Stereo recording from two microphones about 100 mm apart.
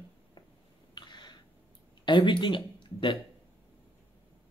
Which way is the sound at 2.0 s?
55° left (ahead or behind).